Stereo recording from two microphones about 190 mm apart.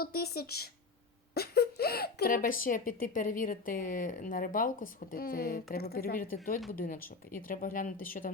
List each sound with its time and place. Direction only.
0.0 s speech: 55° left (ahead or behind)